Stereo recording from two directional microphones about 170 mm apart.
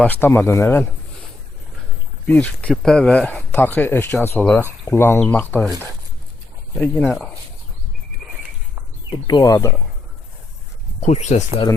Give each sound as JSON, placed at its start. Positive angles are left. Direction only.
{"t": 0.0, "sound": "speech", "side_deg": 10}
{"t": 2.2, "sound": "speech", "side_deg": 10}
{"t": 6.7, "sound": "speech", "side_deg": 10}
{"t": 9.0, "sound": "speech", "side_deg": 25}
{"t": 11.0, "sound": "speech", "side_deg": 40}